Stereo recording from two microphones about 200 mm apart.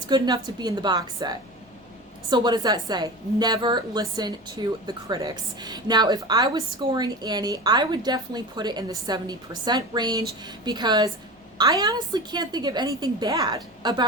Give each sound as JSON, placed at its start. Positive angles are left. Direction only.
{"t": 0.1, "sound": "a woman's voice", "side_deg": -20}